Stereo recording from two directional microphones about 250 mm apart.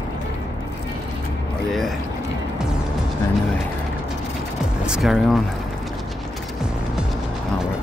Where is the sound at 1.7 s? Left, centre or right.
Centre.